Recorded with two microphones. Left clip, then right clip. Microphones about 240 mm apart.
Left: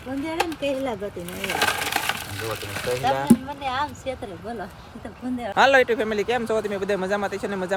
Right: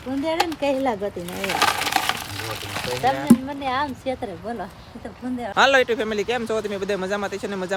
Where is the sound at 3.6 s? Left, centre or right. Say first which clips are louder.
Right 2 dB; right.